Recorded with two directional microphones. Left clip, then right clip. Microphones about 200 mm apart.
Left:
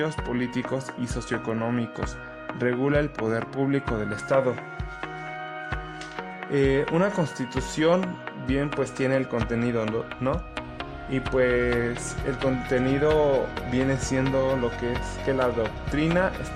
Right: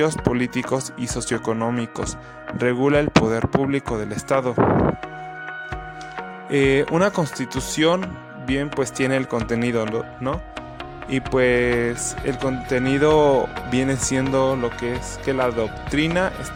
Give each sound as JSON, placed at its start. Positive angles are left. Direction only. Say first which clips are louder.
{"t": 0.0, "sound": "speech", "louder": "right 7 dB", "side_deg": -35}
{"t": 6.5, "sound": "speech", "louder": "right 5 dB", "side_deg": -35}